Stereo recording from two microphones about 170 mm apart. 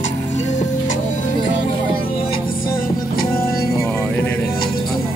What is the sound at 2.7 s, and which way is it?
Music, 60° left (ahead or behind).